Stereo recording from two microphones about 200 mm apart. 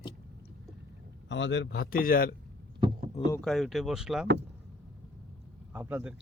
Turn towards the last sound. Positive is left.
turn(degrees=-10)  # may be behind; listen again after turning